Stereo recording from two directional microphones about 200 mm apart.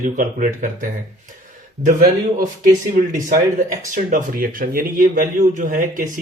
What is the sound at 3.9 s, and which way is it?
A man's voice, 40° right (ahead or behind).